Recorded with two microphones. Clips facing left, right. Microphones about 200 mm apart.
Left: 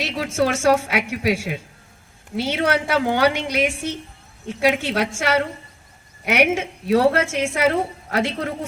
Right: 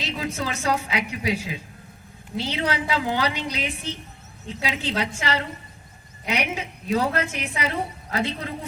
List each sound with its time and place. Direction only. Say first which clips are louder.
0.4 s a woman's voice: left 10 dB; 80° left